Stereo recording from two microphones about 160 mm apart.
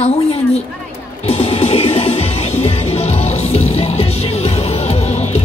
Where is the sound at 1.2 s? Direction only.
40° left (ahead or behind).